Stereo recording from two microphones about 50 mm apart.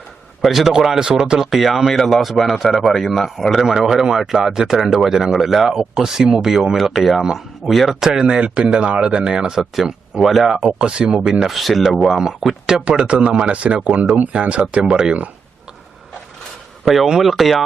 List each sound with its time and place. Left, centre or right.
0.4 s speech: centre
10.8 s speech: centre
11.4 s speech: centre
12.8 s speech: right
16.8 s speech: centre